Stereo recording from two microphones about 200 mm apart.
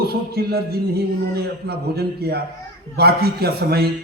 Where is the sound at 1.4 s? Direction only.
50° right (ahead or behind).